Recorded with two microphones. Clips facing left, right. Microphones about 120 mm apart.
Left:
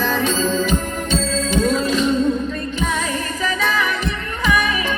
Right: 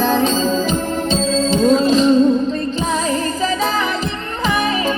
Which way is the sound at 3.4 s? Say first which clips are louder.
Right 2 dB; 35° right (ahead or behind).